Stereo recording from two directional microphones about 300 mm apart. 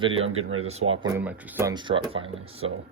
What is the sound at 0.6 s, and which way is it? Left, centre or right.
Speech, right.